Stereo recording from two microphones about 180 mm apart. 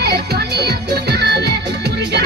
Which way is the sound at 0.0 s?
65° right (ahead or behind).